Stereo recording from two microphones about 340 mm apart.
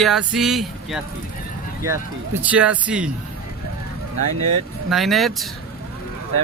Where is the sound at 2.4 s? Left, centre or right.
Centre.